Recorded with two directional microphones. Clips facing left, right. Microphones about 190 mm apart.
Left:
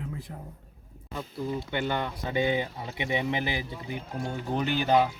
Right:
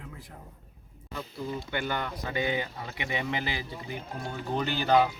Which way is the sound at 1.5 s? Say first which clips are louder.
Left 2 dB; 20° left (ahead or behind).